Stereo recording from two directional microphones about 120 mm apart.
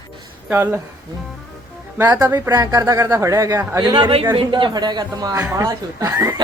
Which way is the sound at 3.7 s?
40° right (ahead or behind).